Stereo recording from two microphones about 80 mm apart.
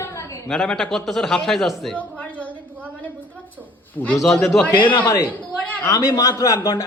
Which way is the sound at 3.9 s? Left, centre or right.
Centre.